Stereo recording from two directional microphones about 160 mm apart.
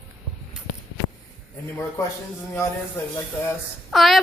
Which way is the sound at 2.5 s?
15° left (ahead or behind).